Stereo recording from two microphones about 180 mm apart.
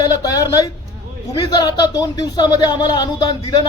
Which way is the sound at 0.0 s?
20° left (ahead or behind).